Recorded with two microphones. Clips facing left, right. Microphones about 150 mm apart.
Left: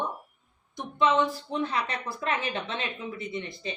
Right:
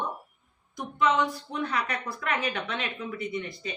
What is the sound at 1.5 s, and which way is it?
Speech, 25° left (ahead or behind).